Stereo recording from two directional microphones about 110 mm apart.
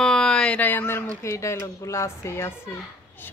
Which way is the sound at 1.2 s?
25° left (ahead or behind).